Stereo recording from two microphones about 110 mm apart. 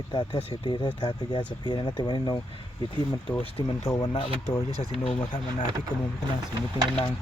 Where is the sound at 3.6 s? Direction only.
50° left (ahead or behind).